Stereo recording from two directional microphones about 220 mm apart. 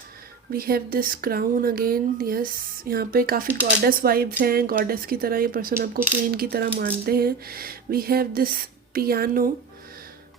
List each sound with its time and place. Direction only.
0.5 s speech: 40° right (ahead or behind)